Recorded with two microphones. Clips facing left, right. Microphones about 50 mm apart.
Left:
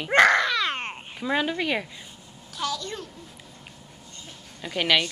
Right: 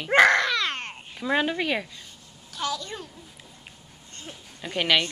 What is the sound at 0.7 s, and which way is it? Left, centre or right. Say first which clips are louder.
Babbling: left 3 dB; centre.